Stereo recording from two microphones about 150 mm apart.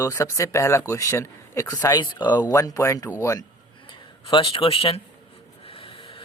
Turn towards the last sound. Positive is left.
turn(degrees=35)  # may be behind; listen again after turning